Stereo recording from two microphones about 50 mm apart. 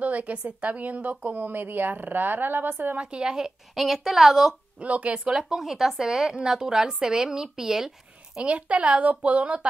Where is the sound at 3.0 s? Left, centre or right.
Centre.